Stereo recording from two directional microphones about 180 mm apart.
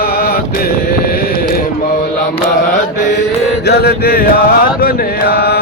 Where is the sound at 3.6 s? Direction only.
60° left (ahead or behind).